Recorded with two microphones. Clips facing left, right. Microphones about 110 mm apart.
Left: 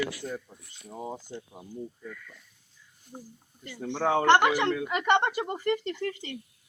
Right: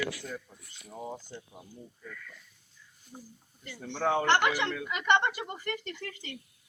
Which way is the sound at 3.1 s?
35° left (ahead or behind).